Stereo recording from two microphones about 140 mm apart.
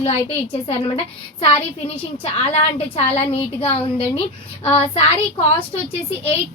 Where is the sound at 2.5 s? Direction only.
45° left (ahead or behind).